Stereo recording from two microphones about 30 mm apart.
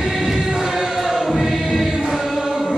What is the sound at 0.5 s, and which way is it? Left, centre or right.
Chant, right.